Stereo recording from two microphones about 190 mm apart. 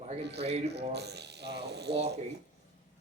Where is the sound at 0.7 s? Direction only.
60° right (ahead or behind).